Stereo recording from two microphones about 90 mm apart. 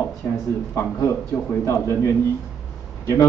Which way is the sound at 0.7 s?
30° left (ahead or behind).